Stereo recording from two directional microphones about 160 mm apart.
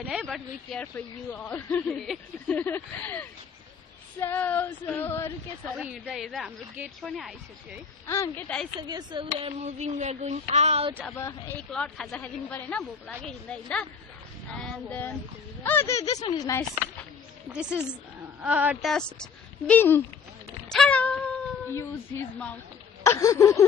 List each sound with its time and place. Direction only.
0.1 s speech: centre (ahead or behind); by 5.3 s 15° left (ahead or behind)
5.7 s speech: 5° right (ahead or behind)
8.0 s speech: 15° left (ahead or behind)
8.9 s speech: 25° right (ahead or behind)
9.3 s speech: 40° right (ahead or behind)
11.0 s speech: 15° left (ahead or behind)
11.7 s speech: 5° left (ahead or behind); by 16.6 s 20° left (ahead or behind)
17.5 s a woman's voice: 5° right (ahead or behind)
19.6 s speech: 10° left (ahead or behind)
20.7 s cat: 5° left (ahead or behind)
23.0 s speech: 20° left (ahead or behind)